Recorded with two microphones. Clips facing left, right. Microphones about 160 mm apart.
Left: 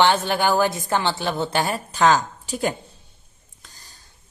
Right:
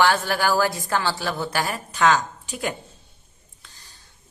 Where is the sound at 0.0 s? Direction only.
20° left (ahead or behind).